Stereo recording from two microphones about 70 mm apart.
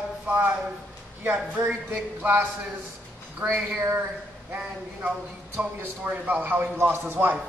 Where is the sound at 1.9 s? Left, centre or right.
Right.